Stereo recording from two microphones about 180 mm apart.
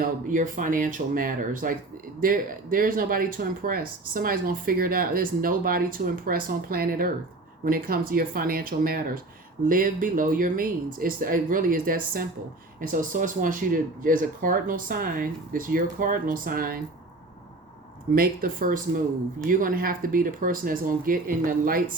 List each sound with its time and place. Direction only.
0.0 s speech: 45° right (ahead or behind)
18.1 s speech: 55° right (ahead or behind)